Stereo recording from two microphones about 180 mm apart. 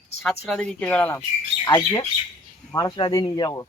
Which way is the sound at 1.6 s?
25° left (ahead or behind).